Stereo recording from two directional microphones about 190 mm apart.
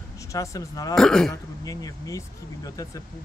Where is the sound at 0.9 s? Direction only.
5° left (ahead or behind).